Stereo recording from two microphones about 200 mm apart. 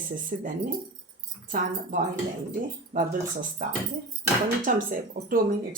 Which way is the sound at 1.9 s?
40° right (ahead or behind).